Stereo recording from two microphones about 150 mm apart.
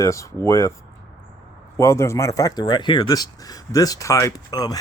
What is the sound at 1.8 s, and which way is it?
Speech, 20° left (ahead or behind).